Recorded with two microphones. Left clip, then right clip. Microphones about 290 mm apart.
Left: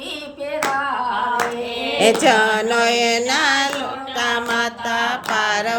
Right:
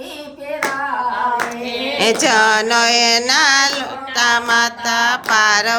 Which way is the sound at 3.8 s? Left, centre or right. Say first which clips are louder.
Right 5 dB; centre.